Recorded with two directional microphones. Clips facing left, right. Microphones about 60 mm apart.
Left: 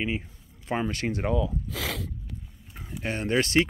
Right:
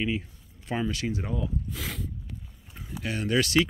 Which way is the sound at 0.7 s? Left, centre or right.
Left.